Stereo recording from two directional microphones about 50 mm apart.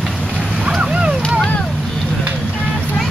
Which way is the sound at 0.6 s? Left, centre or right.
Centre.